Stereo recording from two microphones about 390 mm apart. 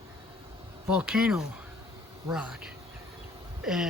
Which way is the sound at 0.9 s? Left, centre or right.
Centre.